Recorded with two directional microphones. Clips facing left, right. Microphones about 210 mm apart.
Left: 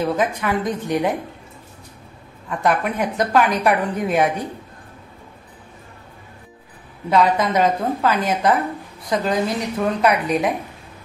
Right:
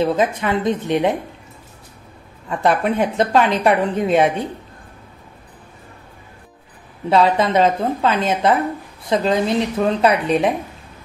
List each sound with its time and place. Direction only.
0.0 s a woman's voice: 25° right (ahead or behind)
2.6 s a woman's voice: 30° right (ahead or behind)
7.1 s a woman's voice: 30° right (ahead or behind)